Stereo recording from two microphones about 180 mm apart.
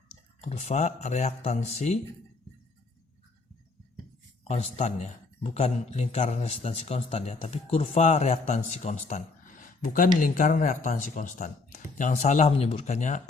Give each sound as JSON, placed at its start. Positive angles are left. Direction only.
{"t": 0.4, "sound": "speech", "side_deg": 40}
{"t": 4.4, "sound": "speech", "side_deg": 35}